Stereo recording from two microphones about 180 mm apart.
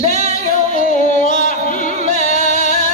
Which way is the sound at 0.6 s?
50° left (ahead or behind).